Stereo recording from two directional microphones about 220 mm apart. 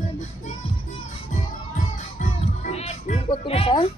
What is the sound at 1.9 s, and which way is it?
Music, 35° left (ahead or behind).